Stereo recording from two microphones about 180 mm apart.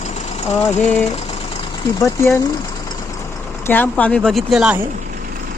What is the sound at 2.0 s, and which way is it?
Speech, 15° left (ahead or behind).